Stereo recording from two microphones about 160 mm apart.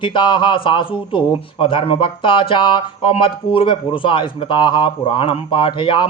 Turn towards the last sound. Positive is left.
turn(degrees=30)  # may be behind; listen again after turning